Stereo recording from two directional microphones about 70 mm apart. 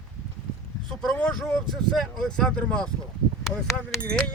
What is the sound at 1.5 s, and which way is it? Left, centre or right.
Speech, centre.